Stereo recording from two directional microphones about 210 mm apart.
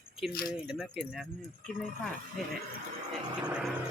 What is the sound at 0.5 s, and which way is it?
Speech, 5° right (ahead or behind).